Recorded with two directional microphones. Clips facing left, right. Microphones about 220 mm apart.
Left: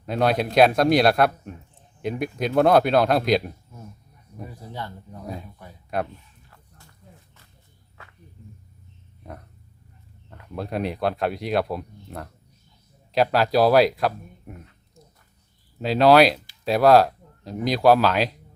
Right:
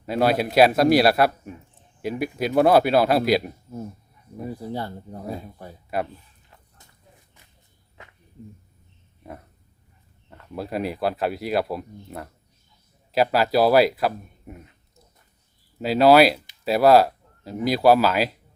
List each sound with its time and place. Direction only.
0.0 s speech: 5° right (ahead or behind)
4.4 s speech: 35° right (ahead or behind)
5.9 s speech: 5° right (ahead or behind)
10.5 s speech: 5° right (ahead or behind)
15.8 s speech: 5° right (ahead or behind)